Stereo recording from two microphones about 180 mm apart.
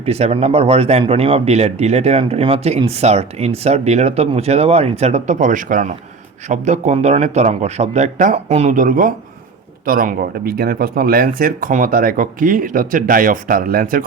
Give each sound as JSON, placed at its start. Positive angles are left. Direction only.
{"t": 0.0, "sound": "speech", "side_deg": -35}